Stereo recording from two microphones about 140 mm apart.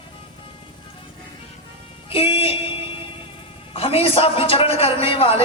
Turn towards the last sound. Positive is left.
turn(degrees=40)  # may be behind; listen again after turning